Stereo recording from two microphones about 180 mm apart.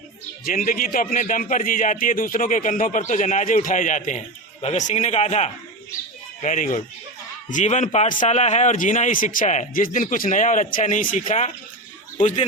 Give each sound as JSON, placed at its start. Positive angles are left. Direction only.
{"t": 0.4, "sound": "a man's voice", "side_deg": 50}